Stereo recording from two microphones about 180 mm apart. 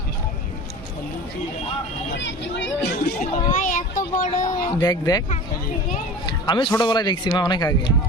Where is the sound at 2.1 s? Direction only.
90° left.